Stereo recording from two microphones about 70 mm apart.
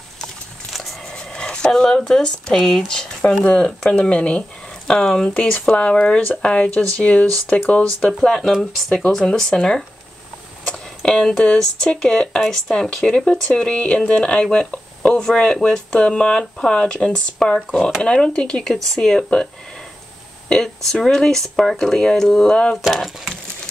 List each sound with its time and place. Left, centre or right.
0.7 s music: centre
1.1 s speech: centre
3.4 s speech: centre
8.2 s speech: centre
20.4 s speech: centre
22.8 s speech: centre